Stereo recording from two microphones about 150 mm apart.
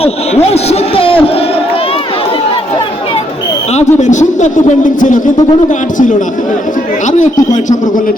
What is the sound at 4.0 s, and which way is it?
A man's voice, 55° left (ahead or behind).